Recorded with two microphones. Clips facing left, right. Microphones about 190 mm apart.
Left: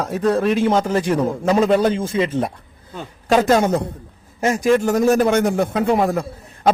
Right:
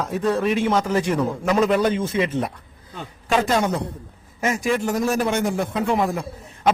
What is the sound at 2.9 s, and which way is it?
A man's voice, 40° left (ahead or behind).